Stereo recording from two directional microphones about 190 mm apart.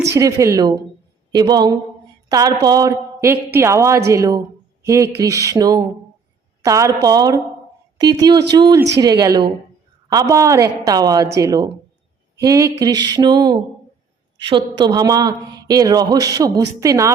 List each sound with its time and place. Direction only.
0.1 s a woman's voice: 15° right (ahead or behind)